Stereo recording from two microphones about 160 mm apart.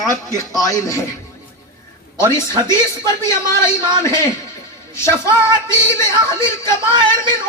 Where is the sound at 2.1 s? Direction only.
15° left (ahead or behind).